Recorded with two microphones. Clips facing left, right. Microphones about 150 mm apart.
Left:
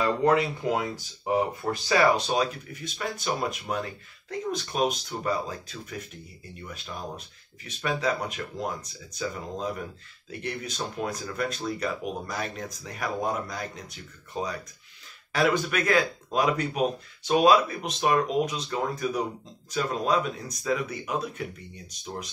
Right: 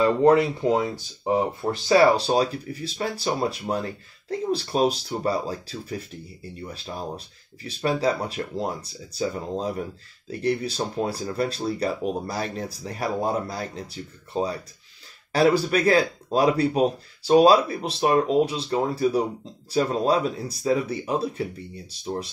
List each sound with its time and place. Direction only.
0.0 s speech: 30° right (ahead or behind)